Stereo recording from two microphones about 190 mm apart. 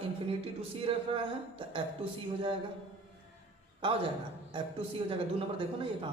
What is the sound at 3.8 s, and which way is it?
A man's voice, 25° right (ahead or behind).